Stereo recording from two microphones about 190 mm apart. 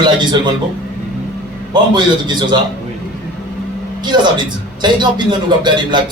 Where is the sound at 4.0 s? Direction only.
20° right (ahead or behind).